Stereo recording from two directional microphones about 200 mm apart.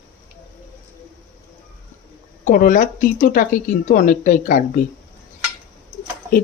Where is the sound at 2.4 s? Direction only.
40° left (ahead or behind).